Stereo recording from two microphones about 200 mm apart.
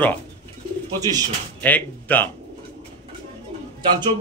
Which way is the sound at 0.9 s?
20° right (ahead or behind).